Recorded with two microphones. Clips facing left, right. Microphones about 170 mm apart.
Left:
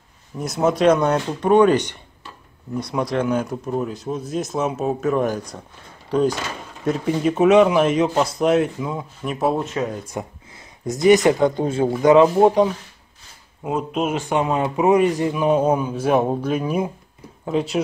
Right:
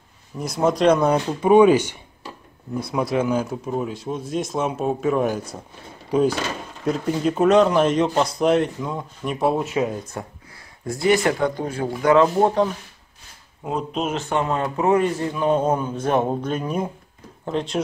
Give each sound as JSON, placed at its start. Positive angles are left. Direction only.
{"t": 0.4, "sound": "speech", "side_deg": 0}
{"t": 10.1, "sound": "a man's voice", "side_deg": 15}
{"t": 13.7, "sound": "a man's voice", "side_deg": 5}